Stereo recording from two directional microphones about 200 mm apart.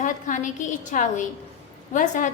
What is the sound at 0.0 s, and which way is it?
A woman's voice, 40° left (ahead or behind).